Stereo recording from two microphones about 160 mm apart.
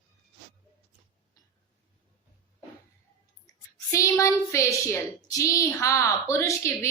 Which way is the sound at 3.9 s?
20° left (ahead or behind).